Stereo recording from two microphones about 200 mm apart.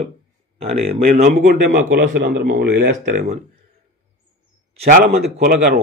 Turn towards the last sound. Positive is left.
turn(degrees=-50)  # may be behind; listen again after turning